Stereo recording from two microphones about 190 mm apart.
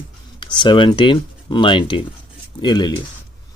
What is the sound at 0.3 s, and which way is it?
Speech, 25° left (ahead or behind).